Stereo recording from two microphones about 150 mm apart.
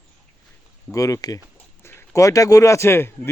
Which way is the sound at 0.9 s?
20° left (ahead or behind).